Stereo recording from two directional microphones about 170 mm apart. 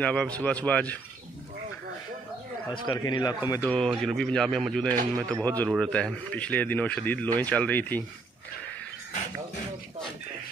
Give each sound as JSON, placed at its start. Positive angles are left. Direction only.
{"t": 0.0, "sound": "speech", "side_deg": 5}
{"t": 2.7, "sound": "speech", "side_deg": 25}
{"t": 3.6, "sound": "speech", "side_deg": 5}